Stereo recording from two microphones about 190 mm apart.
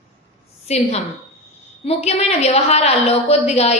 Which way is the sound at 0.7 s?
35° left (ahead or behind).